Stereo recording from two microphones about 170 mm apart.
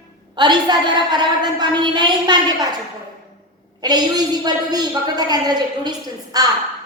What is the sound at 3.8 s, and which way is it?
A woman's voice, 25° right (ahead or behind).